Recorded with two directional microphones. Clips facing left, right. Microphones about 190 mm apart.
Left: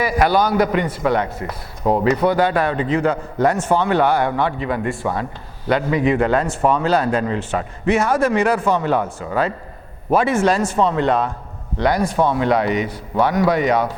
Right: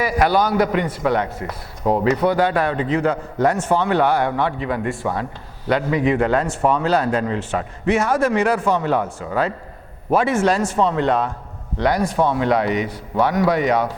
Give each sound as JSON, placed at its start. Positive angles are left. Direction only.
{"t": 0.0, "sound": "speech", "side_deg": 15}
{"t": 1.8, "sound": "speech", "side_deg": 30}
{"t": 2.0, "sound": "speech", "side_deg": 15}